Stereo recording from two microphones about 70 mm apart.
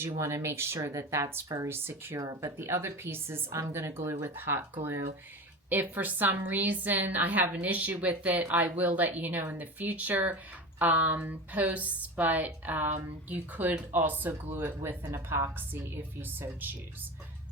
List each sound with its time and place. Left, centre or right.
0.0 s a woman's voice: right
1.6 s a woman's voice: right
2.1 s speech: right
2.6 s a woman's voice: right